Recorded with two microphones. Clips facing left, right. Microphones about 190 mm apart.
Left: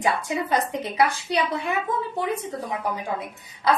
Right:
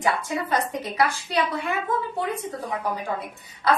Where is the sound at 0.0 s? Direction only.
15° left (ahead or behind).